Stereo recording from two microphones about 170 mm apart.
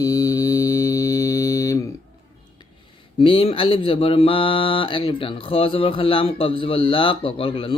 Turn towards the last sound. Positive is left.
turn(degrees=30)  # may be behind; listen again after turning